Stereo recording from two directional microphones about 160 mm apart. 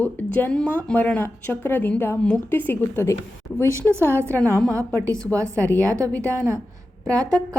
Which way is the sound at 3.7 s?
15° right (ahead or behind).